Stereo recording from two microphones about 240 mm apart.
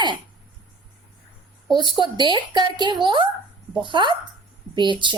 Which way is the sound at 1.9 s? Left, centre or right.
Centre.